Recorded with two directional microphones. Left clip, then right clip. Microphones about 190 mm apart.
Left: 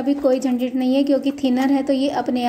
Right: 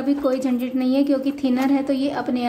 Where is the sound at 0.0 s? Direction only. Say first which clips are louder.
Left 3 dB; 10° left (ahead or behind).